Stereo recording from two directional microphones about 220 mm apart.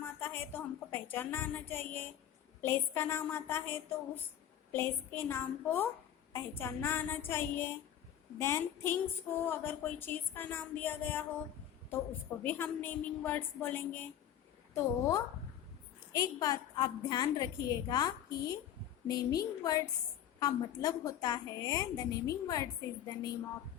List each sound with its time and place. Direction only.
0.0 s a woman's voice: 10° left (ahead or behind)
12.4 s a woman's voice: 10° left (ahead or behind)